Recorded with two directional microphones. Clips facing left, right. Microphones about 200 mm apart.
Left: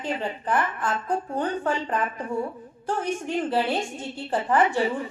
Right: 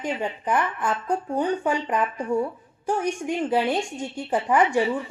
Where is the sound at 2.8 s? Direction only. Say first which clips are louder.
Right 3 dB; 15° right (ahead or behind).